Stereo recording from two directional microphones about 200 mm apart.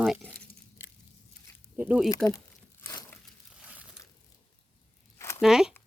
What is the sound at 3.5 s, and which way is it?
Crumpling, 5° right (ahead or behind).